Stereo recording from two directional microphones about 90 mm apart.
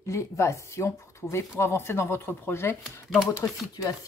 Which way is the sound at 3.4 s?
40° left (ahead or behind).